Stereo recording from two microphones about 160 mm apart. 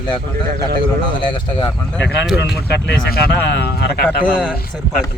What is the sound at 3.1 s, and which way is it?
Speech, 85° left.